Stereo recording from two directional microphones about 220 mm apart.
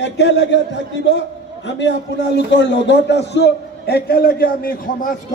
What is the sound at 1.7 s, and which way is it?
A man's voice, 55° left (ahead or behind).